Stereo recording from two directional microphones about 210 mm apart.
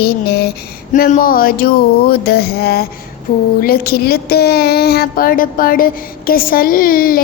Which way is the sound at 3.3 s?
40° left (ahead or behind).